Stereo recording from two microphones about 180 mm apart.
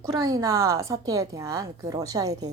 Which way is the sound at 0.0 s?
20° right (ahead or behind).